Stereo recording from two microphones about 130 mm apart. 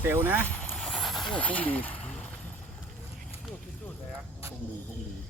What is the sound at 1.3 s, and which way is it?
Speech, 10° left (ahead or behind).